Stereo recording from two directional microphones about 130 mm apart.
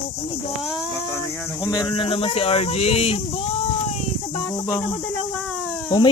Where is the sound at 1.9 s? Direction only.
45° left (ahead or behind).